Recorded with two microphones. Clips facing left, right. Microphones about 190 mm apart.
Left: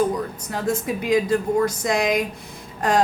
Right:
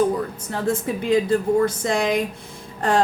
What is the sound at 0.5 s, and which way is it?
A woman's voice, 30° right (ahead or behind).